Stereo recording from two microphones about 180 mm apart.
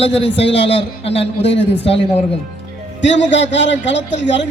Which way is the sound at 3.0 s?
90° left.